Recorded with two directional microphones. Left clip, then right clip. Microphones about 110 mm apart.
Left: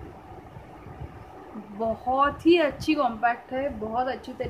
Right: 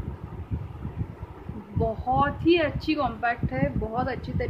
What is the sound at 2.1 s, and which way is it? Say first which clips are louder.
Speech: left 2 dB; 25° left (ahead or behind).